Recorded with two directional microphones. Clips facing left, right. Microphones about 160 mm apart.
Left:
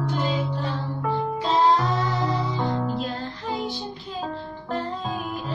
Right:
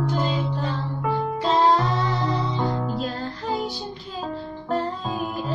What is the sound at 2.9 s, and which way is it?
Music, 40° right (ahead or behind).